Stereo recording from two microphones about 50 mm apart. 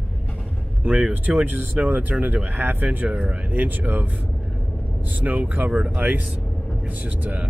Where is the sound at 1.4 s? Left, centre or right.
Right.